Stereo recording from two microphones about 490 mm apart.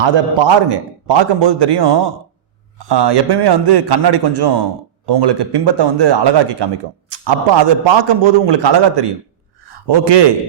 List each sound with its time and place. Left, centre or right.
0.0 s a man's voice: right